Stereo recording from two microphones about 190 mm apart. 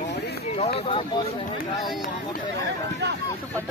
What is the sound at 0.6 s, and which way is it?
Speech, 30° left (ahead or behind).